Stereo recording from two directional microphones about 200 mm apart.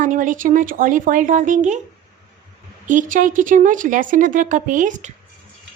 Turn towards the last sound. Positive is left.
turn(degrees=-40)  # may be behind; listen again after turning